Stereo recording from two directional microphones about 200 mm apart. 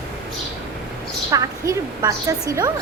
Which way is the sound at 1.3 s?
15° right (ahead or behind).